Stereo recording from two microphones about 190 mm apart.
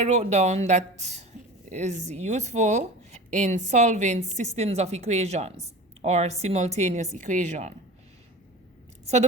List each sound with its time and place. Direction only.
0.0 s speech: 35° right (ahead or behind)